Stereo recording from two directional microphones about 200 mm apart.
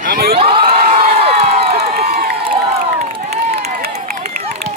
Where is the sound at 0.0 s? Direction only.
50° right (ahead or behind).